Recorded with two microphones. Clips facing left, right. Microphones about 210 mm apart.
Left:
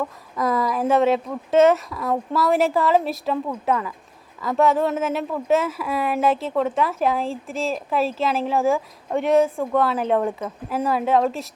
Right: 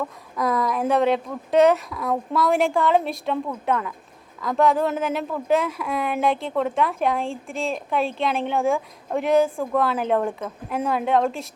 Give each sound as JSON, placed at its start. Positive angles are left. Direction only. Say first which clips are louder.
{"t": 0.0, "sound": "speech", "louder": "left 1 dB", "side_deg": 0}